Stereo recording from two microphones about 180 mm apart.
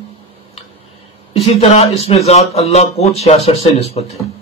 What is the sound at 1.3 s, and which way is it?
A man's voice, 35° left (ahead or behind).